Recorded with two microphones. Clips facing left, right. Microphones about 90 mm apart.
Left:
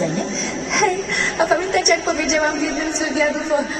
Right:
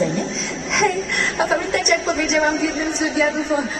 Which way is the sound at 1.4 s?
Centre (ahead or behind).